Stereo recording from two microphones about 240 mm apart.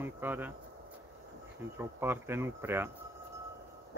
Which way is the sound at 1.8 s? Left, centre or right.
Centre.